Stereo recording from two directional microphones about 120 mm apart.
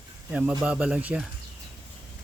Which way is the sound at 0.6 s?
10° right (ahead or behind).